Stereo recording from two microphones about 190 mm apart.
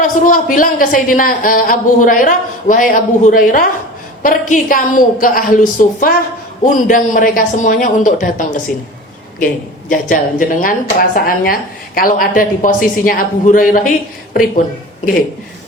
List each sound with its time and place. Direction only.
0.0 s a man's voice: 45° left (ahead or behind)
9.9 s a man's voice: 45° left (ahead or behind)